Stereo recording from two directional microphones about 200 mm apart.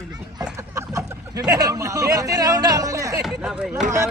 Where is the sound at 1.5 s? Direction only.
20° right (ahead or behind).